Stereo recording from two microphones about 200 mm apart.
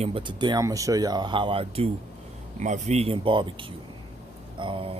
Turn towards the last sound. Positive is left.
turn(degrees=-25)  # may be behind; listen again after turning